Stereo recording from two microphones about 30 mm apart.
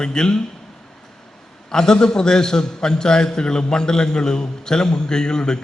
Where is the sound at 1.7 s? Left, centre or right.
Left.